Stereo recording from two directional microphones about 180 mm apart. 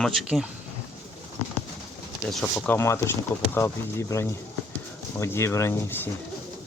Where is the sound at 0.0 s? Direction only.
Centre (ahead or behind).